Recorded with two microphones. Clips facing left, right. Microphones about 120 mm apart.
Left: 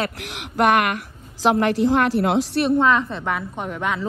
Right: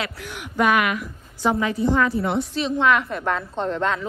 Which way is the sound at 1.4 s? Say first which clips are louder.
Left 3 dB; 80° left.